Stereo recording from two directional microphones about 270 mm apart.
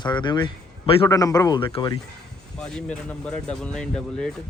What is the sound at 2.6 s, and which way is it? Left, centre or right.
A man's voice, centre.